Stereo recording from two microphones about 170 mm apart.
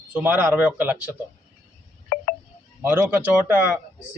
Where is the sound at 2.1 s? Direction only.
55° left (ahead or behind).